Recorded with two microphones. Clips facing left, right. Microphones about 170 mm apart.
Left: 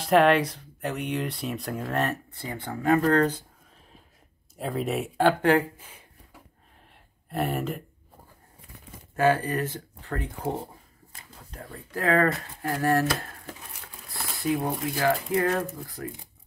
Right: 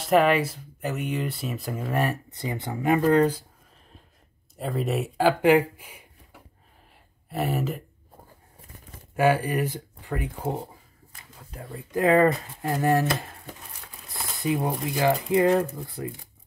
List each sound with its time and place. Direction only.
0.0 s speech: centre (ahead or behind)
4.6 s speech: centre (ahead or behind)
7.2 s speech: centre (ahead or behind)
9.1 s speech: 10° right (ahead or behind)
11.9 s speech: 20° right (ahead or behind)
14.4 s speech: 20° right (ahead or behind)